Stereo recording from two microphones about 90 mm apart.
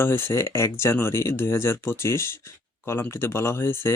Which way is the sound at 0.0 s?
25° left (ahead or behind).